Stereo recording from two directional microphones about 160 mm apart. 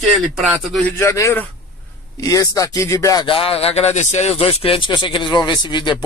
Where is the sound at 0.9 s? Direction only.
20° left (ahead or behind).